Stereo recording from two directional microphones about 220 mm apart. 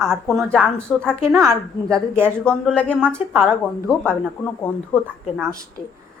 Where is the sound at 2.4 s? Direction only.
5° left (ahead or behind).